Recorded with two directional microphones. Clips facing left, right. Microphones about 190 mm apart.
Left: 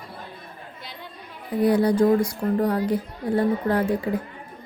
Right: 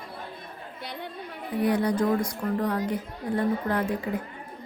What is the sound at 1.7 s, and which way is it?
Speech, 35° left (ahead or behind).